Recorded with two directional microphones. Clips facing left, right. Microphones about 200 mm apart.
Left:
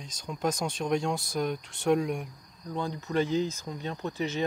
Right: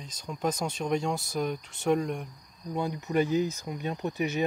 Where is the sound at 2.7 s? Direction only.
10° right (ahead or behind).